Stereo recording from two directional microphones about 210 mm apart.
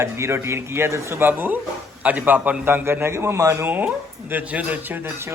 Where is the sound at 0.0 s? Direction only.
15° right (ahead or behind).